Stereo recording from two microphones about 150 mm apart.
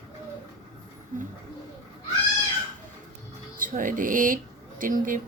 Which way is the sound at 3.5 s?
65° right (ahead or behind).